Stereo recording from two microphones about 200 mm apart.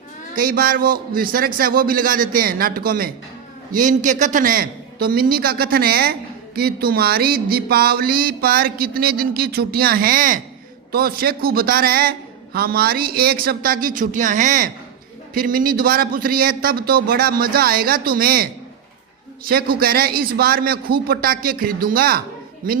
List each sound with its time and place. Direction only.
0.3 s a woman's voice: 45° right (ahead or behind)
19.5 s a woman's voice: 50° right (ahead or behind)